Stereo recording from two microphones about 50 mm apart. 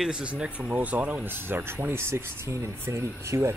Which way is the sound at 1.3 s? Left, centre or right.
Right.